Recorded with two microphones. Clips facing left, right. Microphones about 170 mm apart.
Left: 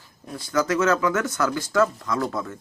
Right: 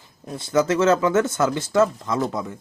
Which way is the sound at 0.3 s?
25° right (ahead or behind).